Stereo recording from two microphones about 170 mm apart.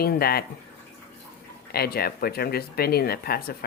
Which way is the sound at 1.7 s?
65° left (ahead or behind).